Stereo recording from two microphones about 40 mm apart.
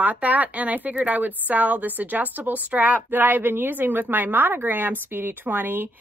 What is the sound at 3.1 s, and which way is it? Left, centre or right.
A woman's voice, right.